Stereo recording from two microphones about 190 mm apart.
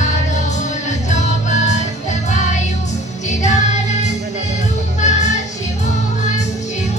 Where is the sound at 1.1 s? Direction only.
40° left (ahead or behind).